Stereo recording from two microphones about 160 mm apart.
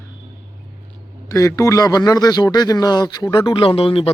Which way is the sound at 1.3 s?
20° left (ahead or behind).